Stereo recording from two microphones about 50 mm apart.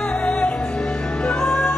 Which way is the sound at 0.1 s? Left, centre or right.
Left.